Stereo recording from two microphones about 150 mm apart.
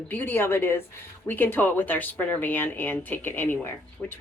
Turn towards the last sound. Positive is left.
turn(degrees=15)  # may be behind; listen again after turning